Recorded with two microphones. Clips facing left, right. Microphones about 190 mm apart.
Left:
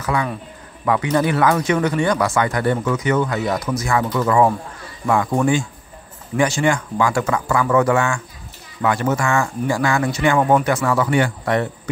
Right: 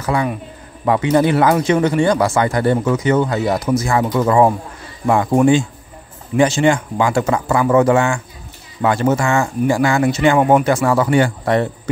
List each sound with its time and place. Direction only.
0.0 s a man's voice: 30° right (ahead or behind)